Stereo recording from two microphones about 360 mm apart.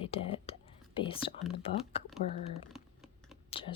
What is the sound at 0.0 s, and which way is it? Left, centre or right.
Speech, centre.